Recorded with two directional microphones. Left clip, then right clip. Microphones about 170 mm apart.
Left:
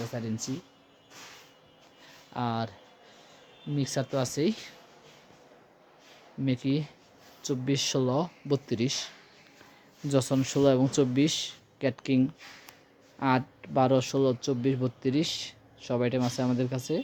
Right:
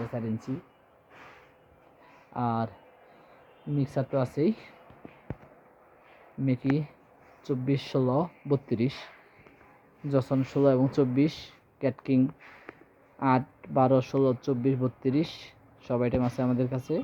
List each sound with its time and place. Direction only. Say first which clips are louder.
0.1 s speech: right 1 dB; centre (ahead or behind)
2.3 s speech: right 2 dB; centre (ahead or behind)
3.8 s speech: right 1 dB; centre (ahead or behind)
6.4 s speech: right 1 dB; 5° left (ahead or behind)
10.1 s speech: even; 20° left (ahead or behind)